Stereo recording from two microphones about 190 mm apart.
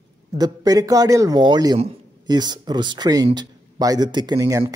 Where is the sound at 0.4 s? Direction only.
20° right (ahead or behind).